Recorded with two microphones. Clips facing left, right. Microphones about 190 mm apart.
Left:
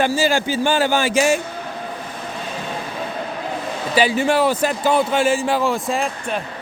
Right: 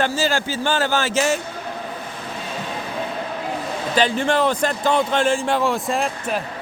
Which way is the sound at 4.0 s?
10° left (ahead or behind).